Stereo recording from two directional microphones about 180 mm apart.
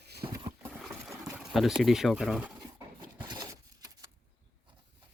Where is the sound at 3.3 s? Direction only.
25° right (ahead or behind).